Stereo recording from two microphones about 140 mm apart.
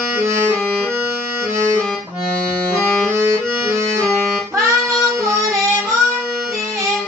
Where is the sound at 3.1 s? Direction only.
20° right (ahead or behind).